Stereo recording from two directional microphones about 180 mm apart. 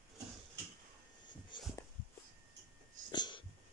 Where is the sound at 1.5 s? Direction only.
25° left (ahead or behind).